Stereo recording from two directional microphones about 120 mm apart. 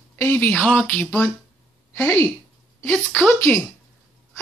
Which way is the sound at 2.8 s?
10° left (ahead or behind).